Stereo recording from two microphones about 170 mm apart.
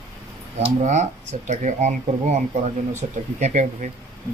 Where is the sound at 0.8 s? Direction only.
45° right (ahead or behind).